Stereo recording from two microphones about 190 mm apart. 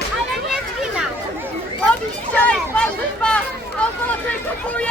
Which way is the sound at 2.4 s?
5° left (ahead or behind).